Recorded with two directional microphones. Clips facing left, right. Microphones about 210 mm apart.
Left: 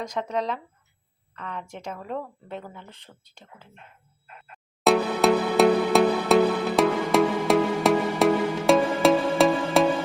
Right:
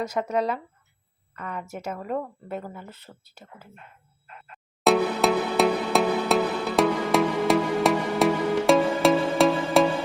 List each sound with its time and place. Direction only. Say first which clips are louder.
0.0 s speech: right 3 dB; 5° right (ahead or behind)
4.8 s music: even; centre (ahead or behind)